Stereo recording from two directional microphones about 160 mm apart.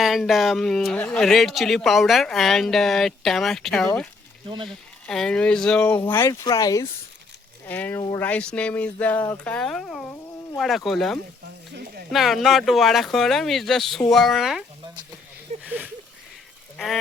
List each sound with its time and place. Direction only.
0.0 s speech: centre (ahead or behind)
4.4 s speech: 30° right (ahead or behind)
5.0 s speech: 5° left (ahead or behind)
6.1 s speech: 15° left (ahead or behind)
7.7 s speech: 10° left (ahead or behind)
15.6 s a sound: 10° right (ahead or behind)
16.7 s speech: centre (ahead or behind)